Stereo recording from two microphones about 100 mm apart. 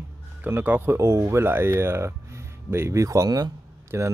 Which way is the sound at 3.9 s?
25° right (ahead or behind).